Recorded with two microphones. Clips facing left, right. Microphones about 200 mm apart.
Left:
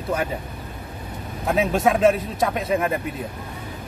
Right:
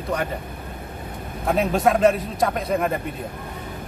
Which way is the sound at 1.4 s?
Centre (ahead or behind).